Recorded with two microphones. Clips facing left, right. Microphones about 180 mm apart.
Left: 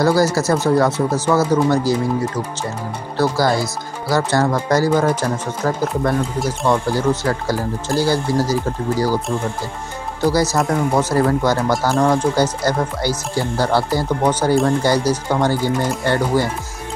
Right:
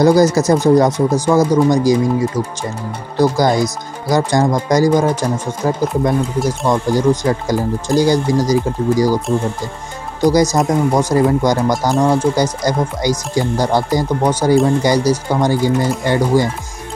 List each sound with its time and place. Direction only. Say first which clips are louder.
0.0 s speech: right 5 dB; 20° right (ahead or behind)
10.2 s speech: right 4 dB; 15° right (ahead or behind)